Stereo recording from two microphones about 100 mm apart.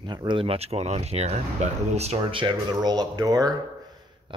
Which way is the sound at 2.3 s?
55° right (ahead or behind).